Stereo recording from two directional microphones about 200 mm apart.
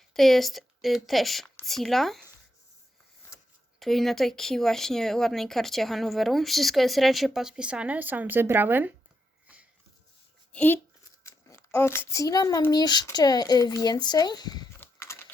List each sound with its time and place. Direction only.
0.1 s speech: centre (ahead or behind)
3.8 s speech: centre (ahead or behind)
10.5 s a child's voice: 10° left (ahead or behind)
14.8 s a sound: 15° left (ahead or behind)